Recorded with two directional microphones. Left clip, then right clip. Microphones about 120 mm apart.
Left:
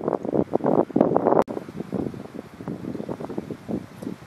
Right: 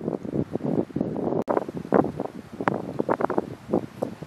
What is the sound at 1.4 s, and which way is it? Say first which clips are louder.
Wind noise: right 8 dB; 60° right (ahead or behind).